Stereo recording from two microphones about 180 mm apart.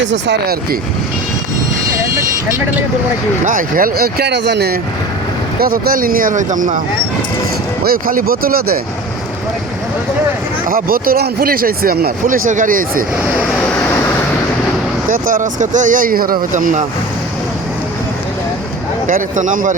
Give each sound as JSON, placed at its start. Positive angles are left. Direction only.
{"t": 0.0, "sound": "speech", "side_deg": -80}
{"t": 3.4, "sound": "speech", "side_deg": -50}
{"t": 7.9, "sound": "speech", "side_deg": -55}
{"t": 10.7, "sound": "speech", "side_deg": -55}
{"t": 15.1, "sound": "speech", "side_deg": -45}
{"t": 19.0, "sound": "speech", "side_deg": -45}